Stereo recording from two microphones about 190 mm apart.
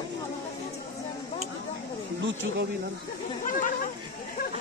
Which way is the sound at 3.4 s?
45° left (ahead or behind).